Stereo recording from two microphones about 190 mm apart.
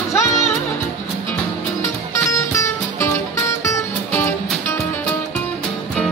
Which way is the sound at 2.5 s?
15° left (ahead or behind).